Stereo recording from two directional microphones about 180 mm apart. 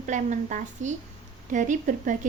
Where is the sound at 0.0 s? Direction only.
45° right (ahead or behind).